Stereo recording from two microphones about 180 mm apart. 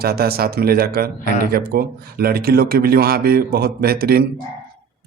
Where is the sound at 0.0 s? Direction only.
60° right (ahead or behind).